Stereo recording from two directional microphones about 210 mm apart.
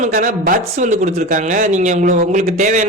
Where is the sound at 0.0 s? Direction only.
35° right (ahead or behind).